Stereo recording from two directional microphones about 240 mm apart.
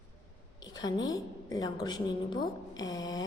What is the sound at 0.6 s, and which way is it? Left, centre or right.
A woman's voice, centre.